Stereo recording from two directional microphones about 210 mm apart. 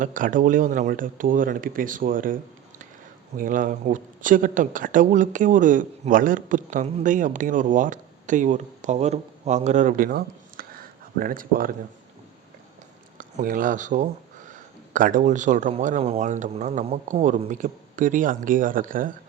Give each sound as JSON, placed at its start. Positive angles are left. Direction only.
{"t": 0.0, "sound": "a man's voice", "side_deg": -40}
{"t": 13.1, "sound": "a man's voice", "side_deg": -40}